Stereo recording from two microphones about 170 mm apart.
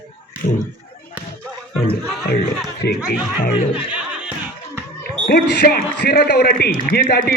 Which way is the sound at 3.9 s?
5° right (ahead or behind).